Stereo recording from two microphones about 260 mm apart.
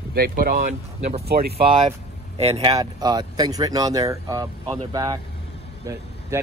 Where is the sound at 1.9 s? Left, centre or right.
Right.